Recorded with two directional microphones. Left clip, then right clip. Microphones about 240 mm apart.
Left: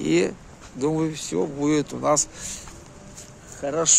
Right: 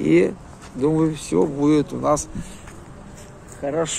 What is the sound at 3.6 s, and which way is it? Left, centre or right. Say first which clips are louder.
Speech: right 2 dB; centre.